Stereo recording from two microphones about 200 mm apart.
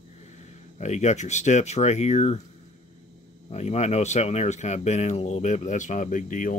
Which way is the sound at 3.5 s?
35° left (ahead or behind).